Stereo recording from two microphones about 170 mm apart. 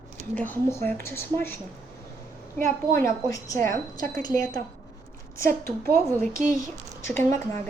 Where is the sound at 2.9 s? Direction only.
20° left (ahead or behind).